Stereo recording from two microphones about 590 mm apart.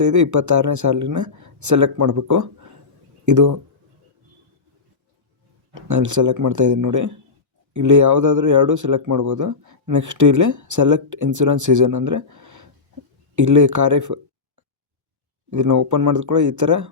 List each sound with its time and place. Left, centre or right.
0.0 s speech: right
5.7 s speech: right
15.4 s speech: right